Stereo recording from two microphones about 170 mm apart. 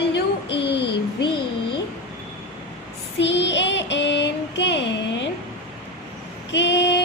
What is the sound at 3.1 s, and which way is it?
Child singing, 90° left.